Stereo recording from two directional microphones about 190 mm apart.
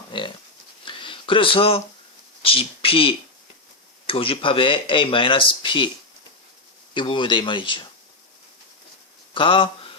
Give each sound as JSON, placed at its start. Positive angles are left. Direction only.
{"t": 0.1, "sound": "pig", "side_deg": 25}
{"t": 0.9, "sound": "a sound", "side_deg": 25}
{"t": 2.4, "sound": "speech", "side_deg": 30}
{"t": 6.9, "sound": "speech", "side_deg": 25}
{"t": 9.3, "sound": "speech", "side_deg": 25}